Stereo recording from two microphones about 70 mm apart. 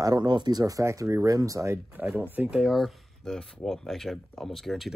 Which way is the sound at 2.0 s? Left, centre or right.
Right.